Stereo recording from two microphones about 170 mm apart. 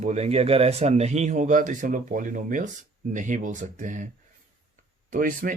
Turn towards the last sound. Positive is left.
turn(degrees=-50)  # may be behind; listen again after turning